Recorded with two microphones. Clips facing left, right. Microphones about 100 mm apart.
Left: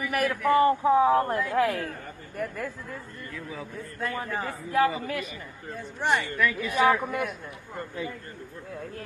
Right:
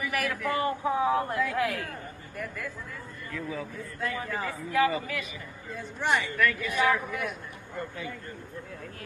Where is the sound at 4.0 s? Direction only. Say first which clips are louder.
Left 1 dB; 45° left (ahead or behind).